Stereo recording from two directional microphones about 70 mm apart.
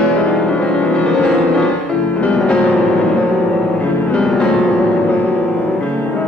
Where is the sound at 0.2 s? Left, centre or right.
Centre.